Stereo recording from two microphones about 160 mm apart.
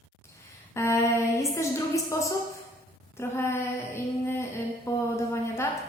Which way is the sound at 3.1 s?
15° left (ahead or behind).